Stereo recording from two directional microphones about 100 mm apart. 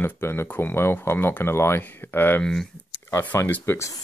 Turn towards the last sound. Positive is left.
turn(degrees=25)  # may be behind; listen again after turning